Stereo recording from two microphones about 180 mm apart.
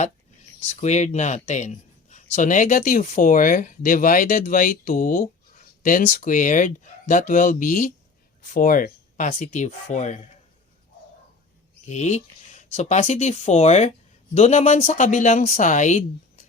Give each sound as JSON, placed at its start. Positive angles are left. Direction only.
{"t": 0.7, "sound": "speech", "side_deg": 40}
{"t": 1.5, "sound": "a sound", "side_deg": 40}
{"t": 2.3, "sound": "speech", "side_deg": 45}
{"t": 11.9, "sound": "speech", "side_deg": 40}